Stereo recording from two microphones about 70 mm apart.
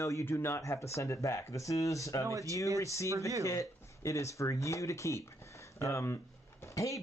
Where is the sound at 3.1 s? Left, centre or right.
Right.